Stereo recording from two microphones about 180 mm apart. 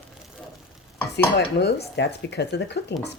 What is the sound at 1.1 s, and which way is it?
Speech, 70° left (ahead or behind).